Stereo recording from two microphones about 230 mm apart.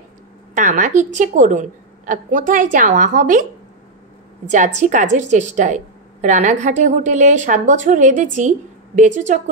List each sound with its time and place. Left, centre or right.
0.6 s a woman's voice: right
4.5 s a woman's voice: right